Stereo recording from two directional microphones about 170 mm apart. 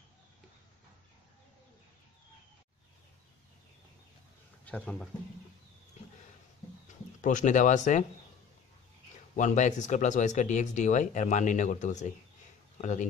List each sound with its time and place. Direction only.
4.6 s speech: 10° left (ahead or behind)
7.2 s speech: 50° left (ahead or behind)
9.4 s speech: 45° left (ahead or behind)